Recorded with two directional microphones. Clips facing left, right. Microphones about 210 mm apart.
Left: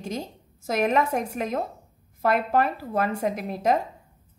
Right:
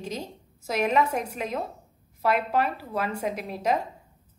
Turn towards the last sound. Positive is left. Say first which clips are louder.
# left 3 dB
turn(degrees=50)  # may be behind; listen again after turning